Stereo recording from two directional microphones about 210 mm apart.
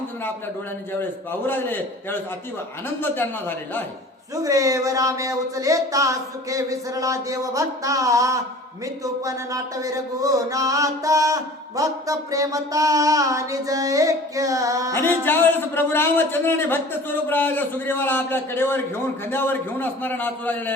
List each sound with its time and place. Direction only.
1.3 s a man's voice: 10° left (ahead or behind)
4.4 s a sound: 15° right (ahead or behind)
14.9 s a man's voice: 10° left (ahead or behind)